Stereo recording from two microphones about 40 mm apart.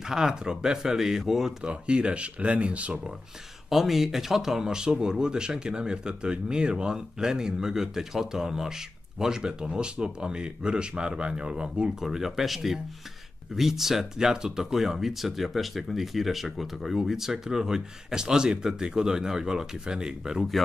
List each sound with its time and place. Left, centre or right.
0.1 s speech: centre
1.6 s speech: right
3.7 s speech: centre; by 12.0 s right
12.0 s speech: centre